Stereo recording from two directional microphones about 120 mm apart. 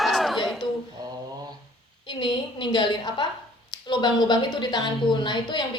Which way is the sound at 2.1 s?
40° left (ahead or behind).